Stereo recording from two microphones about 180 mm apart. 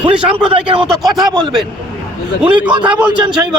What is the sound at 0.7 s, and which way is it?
Speech, 30° right (ahead or behind).